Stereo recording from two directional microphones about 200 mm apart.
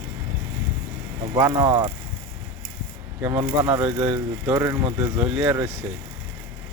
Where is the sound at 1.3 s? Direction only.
10° right (ahead or behind).